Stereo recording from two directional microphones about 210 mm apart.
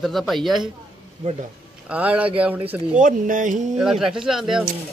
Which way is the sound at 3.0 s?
40° right (ahead or behind).